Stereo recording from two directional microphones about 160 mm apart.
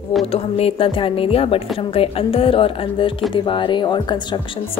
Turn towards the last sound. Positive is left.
turn(degrees=30)  # may be behind; listen again after turning